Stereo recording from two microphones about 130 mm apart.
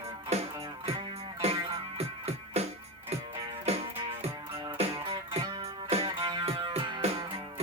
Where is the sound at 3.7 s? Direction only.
55° right (ahead or behind).